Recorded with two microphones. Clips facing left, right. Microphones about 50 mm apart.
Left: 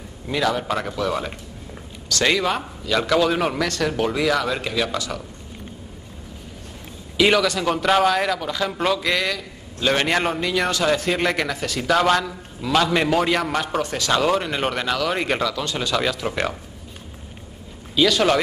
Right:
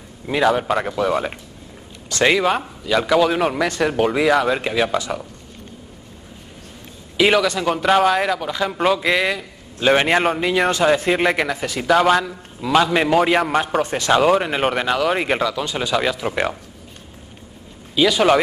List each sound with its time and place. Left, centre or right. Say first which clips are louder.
0.3 s a man's voice: right 5 dB; centre
3.6 s a man's voice: right 4 dB; centre
7.2 s a man's voice: right 2 dB; centre
13.9 s speech: right 5 dB; right
14.2 s a man's voice: right 4 dB; centre
17.9 s a man's voice: right 3 dB; centre